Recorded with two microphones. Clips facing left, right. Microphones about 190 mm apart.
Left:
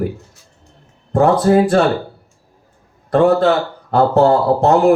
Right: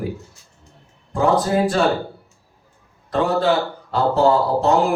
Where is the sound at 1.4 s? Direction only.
55° left (ahead or behind).